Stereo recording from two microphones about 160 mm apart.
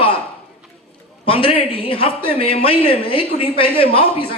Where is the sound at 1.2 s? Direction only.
35° left (ahead or behind).